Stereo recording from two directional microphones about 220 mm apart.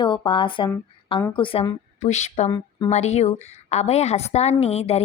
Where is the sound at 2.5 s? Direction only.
20° left (ahead or behind).